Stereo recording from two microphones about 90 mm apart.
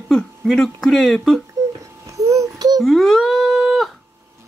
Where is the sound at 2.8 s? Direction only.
Centre (ahead or behind).